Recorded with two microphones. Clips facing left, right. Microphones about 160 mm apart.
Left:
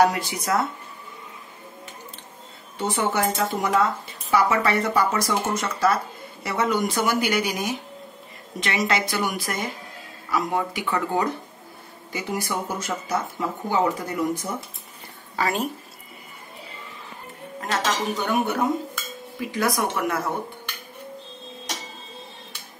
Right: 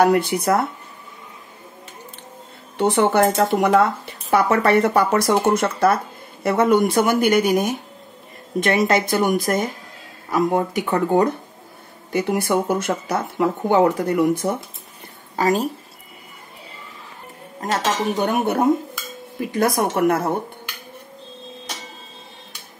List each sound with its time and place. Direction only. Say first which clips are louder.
0.0 s speech: right 5 dB; 60° right (ahead or behind)
2.8 s speech: right 7 dB; 60° right (ahead or behind)
15.3 s speech: right 6 dB; 40° right (ahead or behind)
17.6 s speech: right 3 dB; 40° right (ahead or behind)